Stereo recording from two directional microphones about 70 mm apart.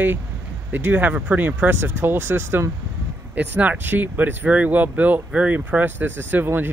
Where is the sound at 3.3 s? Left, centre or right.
Right.